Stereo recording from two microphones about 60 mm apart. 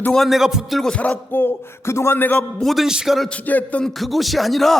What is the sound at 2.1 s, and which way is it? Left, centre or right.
Speech, left.